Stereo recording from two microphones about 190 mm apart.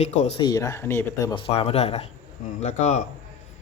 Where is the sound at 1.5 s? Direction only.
30° left (ahead or behind).